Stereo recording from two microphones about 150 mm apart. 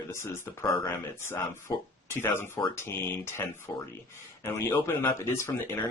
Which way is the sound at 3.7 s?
25° left (ahead or behind).